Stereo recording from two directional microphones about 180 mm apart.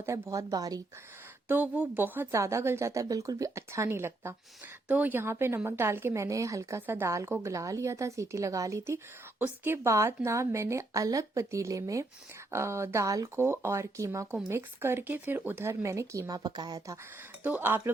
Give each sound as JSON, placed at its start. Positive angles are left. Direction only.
{"t": 0.0, "sound": "speech", "side_deg": -15}
{"t": 1.5, "sound": "a woman's voice", "side_deg": -10}